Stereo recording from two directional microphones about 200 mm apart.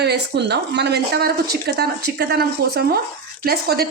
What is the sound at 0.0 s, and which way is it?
A woman's voice, 55° right (ahead or behind).